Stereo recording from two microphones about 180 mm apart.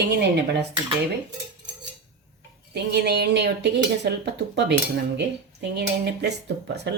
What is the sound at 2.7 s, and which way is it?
Speech, 65° right (ahead or behind).